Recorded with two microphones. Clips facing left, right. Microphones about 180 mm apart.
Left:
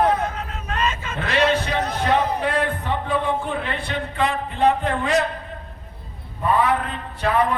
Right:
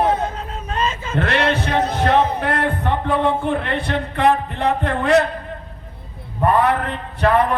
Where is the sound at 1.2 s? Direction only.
65° right (ahead or behind).